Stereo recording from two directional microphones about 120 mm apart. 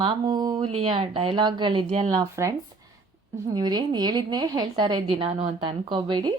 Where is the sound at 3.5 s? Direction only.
35° right (ahead or behind).